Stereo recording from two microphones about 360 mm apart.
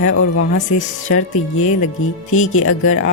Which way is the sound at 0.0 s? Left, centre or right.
Left.